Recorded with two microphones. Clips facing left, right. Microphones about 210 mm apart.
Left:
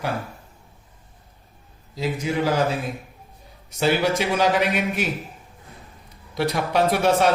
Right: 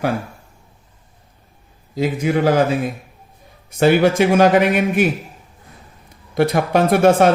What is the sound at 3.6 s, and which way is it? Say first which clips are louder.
A man's voice: right 7 dB; 50° right (ahead or behind).